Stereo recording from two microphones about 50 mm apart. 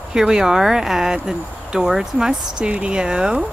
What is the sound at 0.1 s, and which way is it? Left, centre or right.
Speech, centre.